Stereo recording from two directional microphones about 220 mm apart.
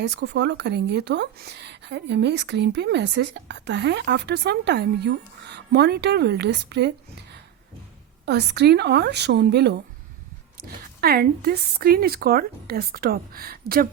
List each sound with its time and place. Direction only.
0.0 s speech: 50° right (ahead or behind)
8.2 s speech: 50° right (ahead or behind)
11.0 s speech: 45° right (ahead or behind)